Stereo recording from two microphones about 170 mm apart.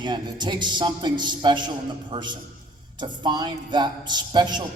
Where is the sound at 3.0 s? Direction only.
25° right (ahead or behind).